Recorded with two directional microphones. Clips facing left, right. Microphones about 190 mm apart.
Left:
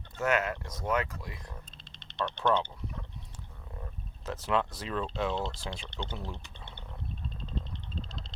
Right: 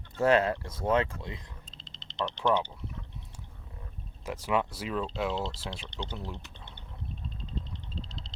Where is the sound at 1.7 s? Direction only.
55° left (ahead or behind).